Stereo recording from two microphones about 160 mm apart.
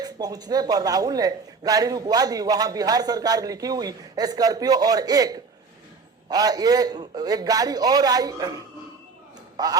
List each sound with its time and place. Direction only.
0.0 s speech: 25° right (ahead or behind)